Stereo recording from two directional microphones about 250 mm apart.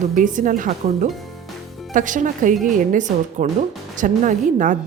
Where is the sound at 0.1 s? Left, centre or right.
Right.